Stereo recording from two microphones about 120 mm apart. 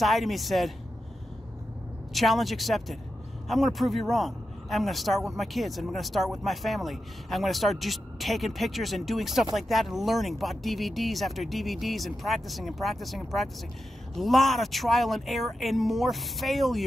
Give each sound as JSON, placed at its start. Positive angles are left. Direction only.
{"t": 0.0, "sound": "speech", "side_deg": 0}
{"t": 2.1, "sound": "speech", "side_deg": 0}